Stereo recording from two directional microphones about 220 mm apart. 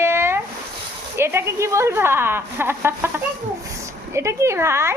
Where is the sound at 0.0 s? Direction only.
10° right (ahead or behind).